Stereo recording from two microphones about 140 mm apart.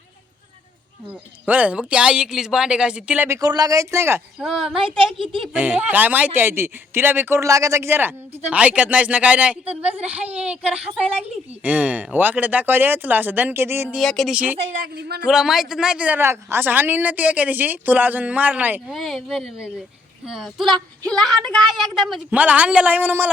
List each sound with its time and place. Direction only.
1.1 s speech: 10° right (ahead or behind)
3.2 s speech: 25° right (ahead or behind)
4.4 s speech: 5° right (ahead or behind)
5.2 s speech: 40° right (ahead or behind)
5.5 s speech: 10° right (ahead or behind)
14.0 s speech: centre (ahead or behind)
18.9 s speech: centre (ahead or behind)